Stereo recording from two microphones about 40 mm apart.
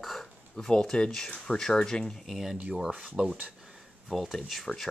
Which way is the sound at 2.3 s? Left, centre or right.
Centre.